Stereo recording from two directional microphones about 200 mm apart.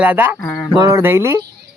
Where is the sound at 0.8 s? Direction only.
15° right (ahead or behind).